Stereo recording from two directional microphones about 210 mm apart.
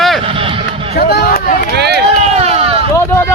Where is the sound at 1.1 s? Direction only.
45° left (ahead or behind).